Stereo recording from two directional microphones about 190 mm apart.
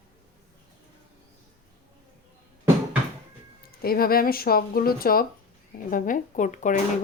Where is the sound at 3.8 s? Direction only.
50° left (ahead or behind).